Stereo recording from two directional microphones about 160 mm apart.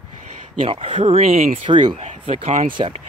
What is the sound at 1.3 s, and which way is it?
Speech, 60° right (ahead or behind).